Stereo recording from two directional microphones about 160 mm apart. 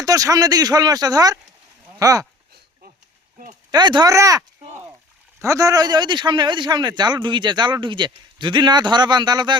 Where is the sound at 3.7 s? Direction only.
25° right (ahead or behind).